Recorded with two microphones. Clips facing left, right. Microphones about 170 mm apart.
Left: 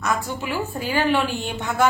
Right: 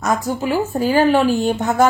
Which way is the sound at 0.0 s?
40° right (ahead or behind).